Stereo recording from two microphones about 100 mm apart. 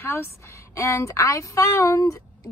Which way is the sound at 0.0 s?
25° left (ahead or behind).